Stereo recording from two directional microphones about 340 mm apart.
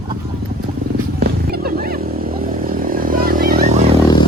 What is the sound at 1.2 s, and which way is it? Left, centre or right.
Wild animals, right.